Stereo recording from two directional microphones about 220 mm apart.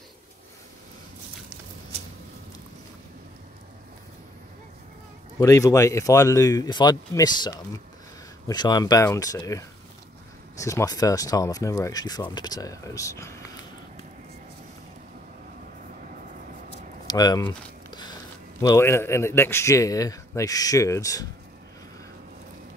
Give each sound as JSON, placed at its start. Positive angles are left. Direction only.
{"t": 5.4, "sound": "speech", "side_deg": 15}
{"t": 17.1, "sound": "a sound", "side_deg": 15}
{"t": 18.6, "sound": "speech", "side_deg": 15}